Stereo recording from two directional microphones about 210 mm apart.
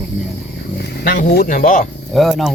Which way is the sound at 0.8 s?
55° left (ahead or behind).